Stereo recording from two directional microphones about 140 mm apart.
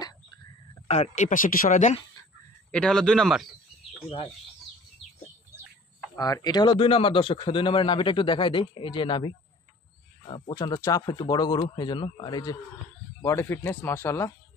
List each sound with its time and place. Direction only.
0.8 s speech: 50° left (ahead or behind); by 1.9 s 80° left
2.7 s a man's voice: 5° left (ahead or behind)
6.1 s speech: 30° left (ahead or behind)
13.2 s speech: 20° left (ahead or behind)